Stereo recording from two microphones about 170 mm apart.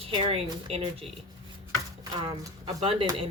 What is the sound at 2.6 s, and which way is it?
Speech, 35° right (ahead or behind).